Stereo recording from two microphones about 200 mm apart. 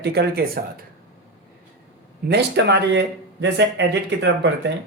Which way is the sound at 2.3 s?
55° right (ahead or behind).